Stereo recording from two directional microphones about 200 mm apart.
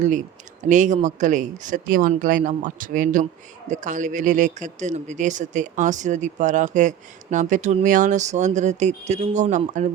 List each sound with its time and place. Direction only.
0.0 s speech: 40° right (ahead or behind)